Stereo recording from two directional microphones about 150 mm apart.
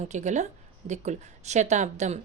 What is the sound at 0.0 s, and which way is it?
A woman's voice, 50° right (ahead or behind).